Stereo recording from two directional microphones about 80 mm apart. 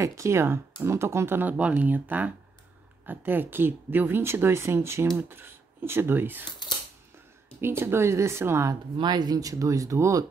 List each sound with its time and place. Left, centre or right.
0.0 s speech: right
1.5 s speech: centre
7.6 s speech: right
8.9 s speech: right